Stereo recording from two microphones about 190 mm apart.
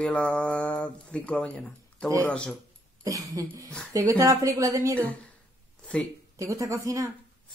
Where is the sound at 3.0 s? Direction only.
20° right (ahead or behind).